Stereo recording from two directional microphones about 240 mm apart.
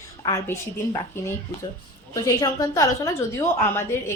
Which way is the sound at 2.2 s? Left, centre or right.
Centre.